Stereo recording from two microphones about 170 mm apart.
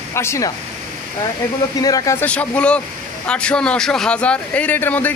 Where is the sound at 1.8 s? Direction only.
20° left (ahead or behind).